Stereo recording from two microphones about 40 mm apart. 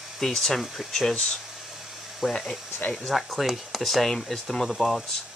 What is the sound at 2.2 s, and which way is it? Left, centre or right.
Speech, centre.